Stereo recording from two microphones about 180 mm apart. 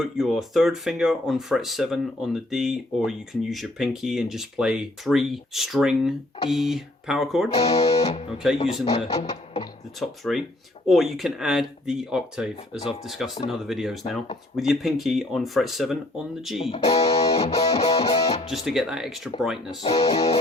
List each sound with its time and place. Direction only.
0.0 s speech: centre (ahead or behind)
7.6 s speech: 35° left (ahead or behind)
10.0 s speech: centre (ahead or behind)
16.6 s speech: 30° left (ahead or behind)
18.4 s speech: centre (ahead or behind)
19.8 s speech: 30° left (ahead or behind)